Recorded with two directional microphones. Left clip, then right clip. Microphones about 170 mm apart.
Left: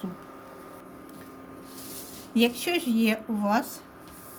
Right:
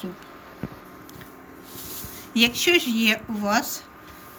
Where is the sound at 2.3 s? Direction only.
40° left (ahead or behind).